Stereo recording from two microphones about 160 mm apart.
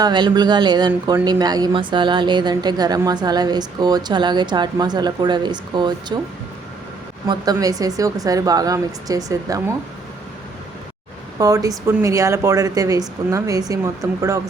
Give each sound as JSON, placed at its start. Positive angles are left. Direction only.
{"t": 0.0, "sound": "speech", "side_deg": -30}
{"t": 7.3, "sound": "speech", "side_deg": -25}
{"t": 11.3, "sound": "speech", "side_deg": -20}